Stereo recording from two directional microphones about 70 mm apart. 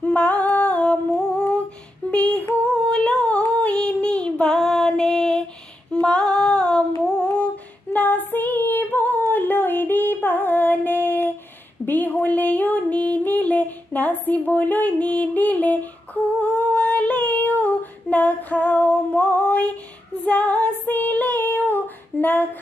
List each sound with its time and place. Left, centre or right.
0.0 s humming: left
2.0 s a sound: centre
7.1 s humming: centre
7.9 s female singing: left
11.8 s music: left
14.2 s a sound: left
16.3 s female singing: left